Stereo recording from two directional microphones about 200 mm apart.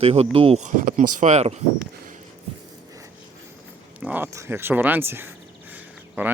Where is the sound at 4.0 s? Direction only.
10° right (ahead or behind).